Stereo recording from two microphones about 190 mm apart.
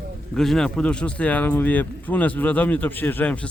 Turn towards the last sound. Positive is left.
turn(degrees=5)  # may be behind; listen again after turning